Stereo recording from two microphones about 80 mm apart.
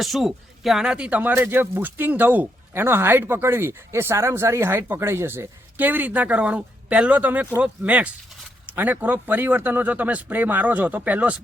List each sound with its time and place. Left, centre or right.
0.0 s speech: centre